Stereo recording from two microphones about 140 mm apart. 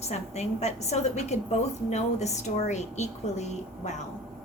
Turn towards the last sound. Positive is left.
turn(degrees=55)  # may be behind; listen again after turning